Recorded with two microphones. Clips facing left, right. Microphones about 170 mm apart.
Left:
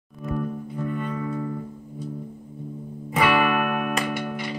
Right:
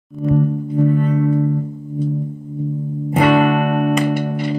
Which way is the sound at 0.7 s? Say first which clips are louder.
Right 13 dB; 45° right (ahead or behind).